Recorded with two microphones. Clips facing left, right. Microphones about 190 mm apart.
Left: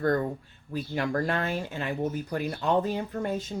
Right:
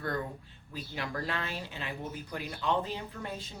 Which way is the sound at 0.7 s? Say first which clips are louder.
Left 9 dB; 50° left (ahead or behind).